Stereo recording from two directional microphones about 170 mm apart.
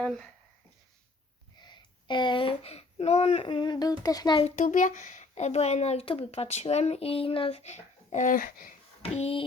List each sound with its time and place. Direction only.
0.0 s speech: 5° left (ahead or behind)
1.5 s speech: 25° left (ahead or behind)
4.4 s a child's voice: 40° left (ahead or behind)
9.0 s speech: 35° left (ahead or behind)